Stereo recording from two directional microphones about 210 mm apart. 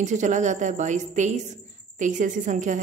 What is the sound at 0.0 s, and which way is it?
Speech, 35° right (ahead or behind).